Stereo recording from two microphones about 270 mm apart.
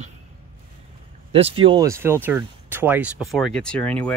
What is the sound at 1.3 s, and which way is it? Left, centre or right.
Speech, right.